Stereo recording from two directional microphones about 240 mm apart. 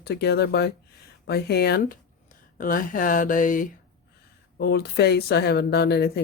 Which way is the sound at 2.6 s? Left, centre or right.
Left.